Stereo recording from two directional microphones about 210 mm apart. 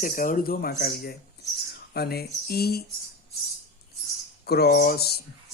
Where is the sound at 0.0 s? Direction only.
40° left (ahead or behind).